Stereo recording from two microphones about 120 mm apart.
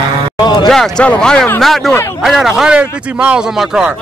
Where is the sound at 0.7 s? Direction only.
5° left (ahead or behind).